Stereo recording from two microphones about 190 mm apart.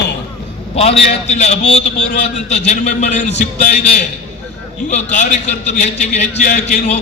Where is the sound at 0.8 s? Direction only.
35° left (ahead or behind).